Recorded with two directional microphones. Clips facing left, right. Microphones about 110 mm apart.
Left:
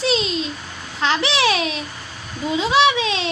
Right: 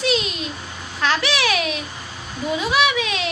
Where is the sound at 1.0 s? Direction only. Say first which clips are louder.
Left 2 dB; 25° left (ahead or behind).